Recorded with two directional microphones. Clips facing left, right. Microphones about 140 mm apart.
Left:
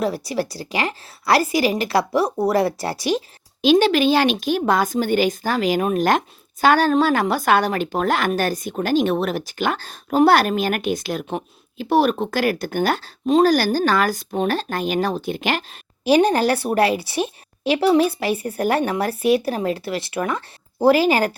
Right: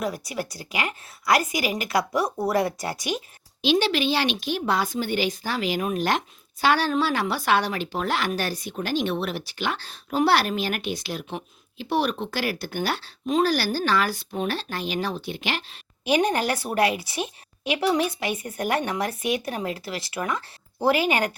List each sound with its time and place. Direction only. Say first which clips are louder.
0.0 s a woman's voice: left 6 dB; 35° left (ahead or behind)
3.6 s speech: left 7 dB; 45° left (ahead or behind)
16.0 s a woman's voice: left 6 dB; 30° left (ahead or behind)